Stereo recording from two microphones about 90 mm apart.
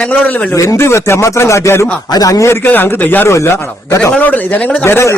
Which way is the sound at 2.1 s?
40° left (ahead or behind).